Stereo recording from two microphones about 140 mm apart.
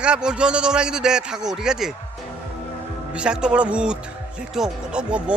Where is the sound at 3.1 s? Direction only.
5° right (ahead or behind).